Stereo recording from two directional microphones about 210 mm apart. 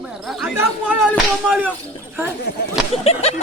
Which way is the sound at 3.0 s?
30° left (ahead or behind).